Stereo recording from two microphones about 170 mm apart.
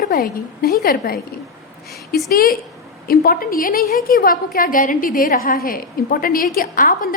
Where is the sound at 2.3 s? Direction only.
60° left (ahead or behind).